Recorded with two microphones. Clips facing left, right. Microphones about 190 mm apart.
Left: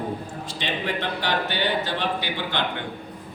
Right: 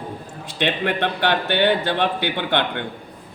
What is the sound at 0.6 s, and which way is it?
A man's voice, 65° right (ahead or behind).